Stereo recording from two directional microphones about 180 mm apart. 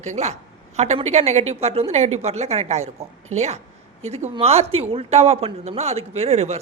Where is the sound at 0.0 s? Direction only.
40° right (ahead or behind).